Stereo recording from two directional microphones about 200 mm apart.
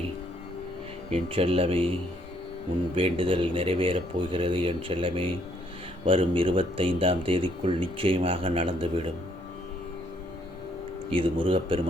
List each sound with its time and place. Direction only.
1.1 s speech: 30° right (ahead or behind)
2.9 s speech: 25° right (ahead or behind)
11.1 s speech: 25° right (ahead or behind)